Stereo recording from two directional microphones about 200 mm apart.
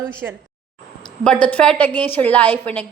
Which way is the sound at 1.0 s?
5° left (ahead or behind).